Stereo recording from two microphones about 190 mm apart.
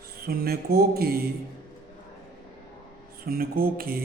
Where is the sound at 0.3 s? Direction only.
55° right (ahead or behind).